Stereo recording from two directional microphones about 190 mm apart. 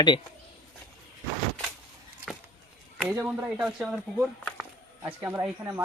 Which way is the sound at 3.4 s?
10° right (ahead or behind).